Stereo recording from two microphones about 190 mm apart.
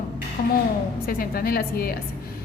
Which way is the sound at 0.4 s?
50° left (ahead or behind).